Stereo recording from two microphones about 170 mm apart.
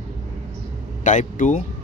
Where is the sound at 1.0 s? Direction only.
45° left (ahead or behind).